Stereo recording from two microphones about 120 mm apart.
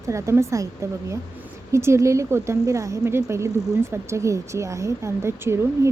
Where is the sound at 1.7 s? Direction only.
25° right (ahead or behind).